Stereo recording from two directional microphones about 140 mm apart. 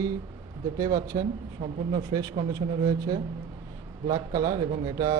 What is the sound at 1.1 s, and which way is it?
Speech, 35° right (ahead or behind).